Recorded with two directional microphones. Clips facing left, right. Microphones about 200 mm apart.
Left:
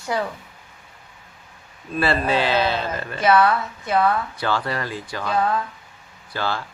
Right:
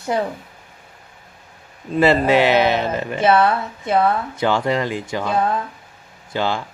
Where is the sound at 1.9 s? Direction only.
20° right (ahead or behind).